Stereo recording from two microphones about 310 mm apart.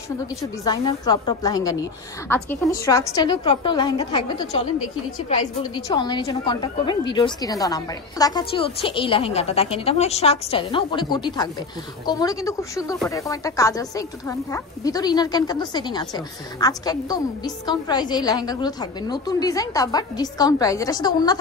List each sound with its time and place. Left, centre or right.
0.7 s a woman's voice: centre